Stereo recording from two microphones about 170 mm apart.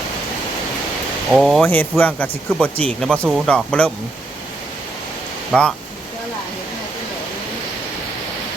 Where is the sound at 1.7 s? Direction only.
10° left (ahead or behind).